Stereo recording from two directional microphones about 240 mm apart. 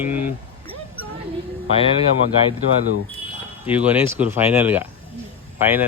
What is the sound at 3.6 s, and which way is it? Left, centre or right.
Speech, centre.